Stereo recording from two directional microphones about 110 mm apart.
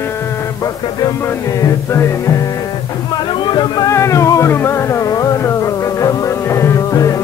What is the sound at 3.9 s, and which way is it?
Music, 30° left (ahead or behind).